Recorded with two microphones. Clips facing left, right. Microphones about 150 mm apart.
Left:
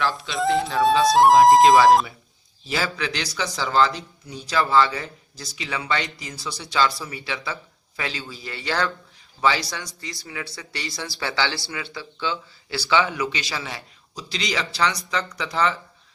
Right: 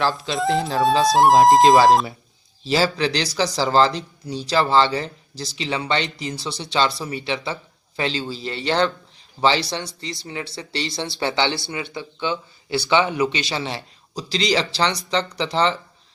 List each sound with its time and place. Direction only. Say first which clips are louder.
0.1 s speech: right 1 dB; centre (ahead or behind)
2.6 s speech: right 7 dB; 30° right (ahead or behind)